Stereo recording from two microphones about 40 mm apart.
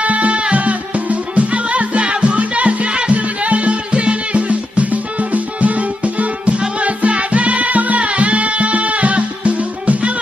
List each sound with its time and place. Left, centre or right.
0.0 s music: right